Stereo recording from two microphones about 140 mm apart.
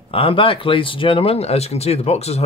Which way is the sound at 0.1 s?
40° left (ahead or behind).